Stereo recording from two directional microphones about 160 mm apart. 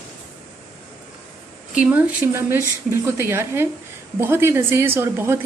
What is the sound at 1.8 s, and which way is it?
Speech, 10° right (ahead or behind).